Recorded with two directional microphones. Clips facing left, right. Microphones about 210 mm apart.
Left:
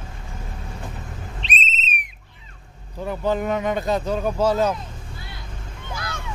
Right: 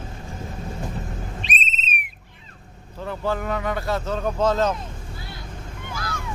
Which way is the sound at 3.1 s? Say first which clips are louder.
Left 3 dB; 20° left (ahead or behind).